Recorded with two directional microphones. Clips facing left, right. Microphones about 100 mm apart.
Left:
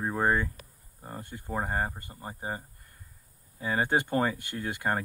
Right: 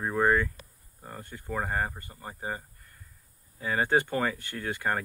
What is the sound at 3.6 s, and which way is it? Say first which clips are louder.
Speech: right 1 dB; 25° left (ahead or behind).